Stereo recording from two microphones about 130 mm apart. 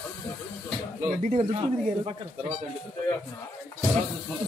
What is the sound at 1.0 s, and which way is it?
Speech, 70° right (ahead or behind).